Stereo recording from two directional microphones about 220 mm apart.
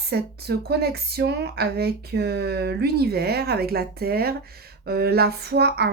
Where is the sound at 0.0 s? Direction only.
45° right (ahead or behind).